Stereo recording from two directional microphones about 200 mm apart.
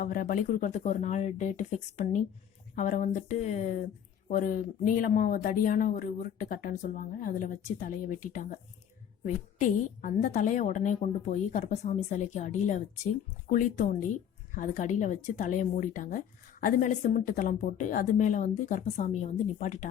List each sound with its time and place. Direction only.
0.0 s speech: 45° left (ahead or behind)